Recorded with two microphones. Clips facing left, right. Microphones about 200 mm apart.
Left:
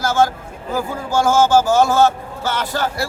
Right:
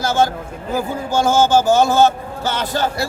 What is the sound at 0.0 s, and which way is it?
A man's voice, 20° right (ahead or behind).